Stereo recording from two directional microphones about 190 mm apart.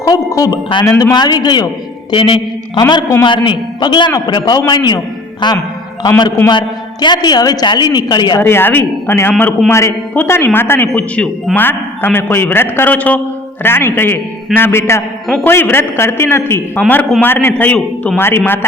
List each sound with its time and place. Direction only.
0.0 s a man's voice: 20° left (ahead or behind)
2.8 s a man's voice: 15° left (ahead or behind)
8.4 s a man's voice: 10° left (ahead or behind)